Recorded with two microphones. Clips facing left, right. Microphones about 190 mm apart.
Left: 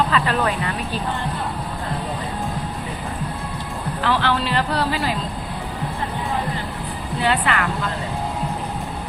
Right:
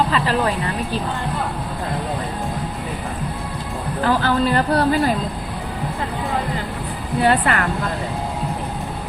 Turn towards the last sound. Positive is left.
turn(degrees=-45)  # may be behind; listen again after turning